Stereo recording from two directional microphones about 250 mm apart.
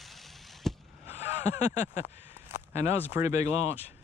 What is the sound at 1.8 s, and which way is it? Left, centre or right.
Speech, left.